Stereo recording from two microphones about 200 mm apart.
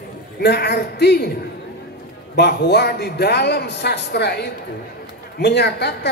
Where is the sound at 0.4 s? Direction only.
55° left (ahead or behind).